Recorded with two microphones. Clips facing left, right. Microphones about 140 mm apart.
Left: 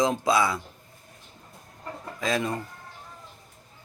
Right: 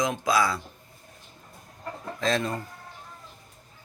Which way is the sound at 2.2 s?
10° left (ahead or behind).